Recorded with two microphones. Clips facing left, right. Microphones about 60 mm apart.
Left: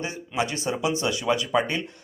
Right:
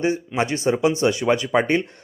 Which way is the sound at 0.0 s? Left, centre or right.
Right.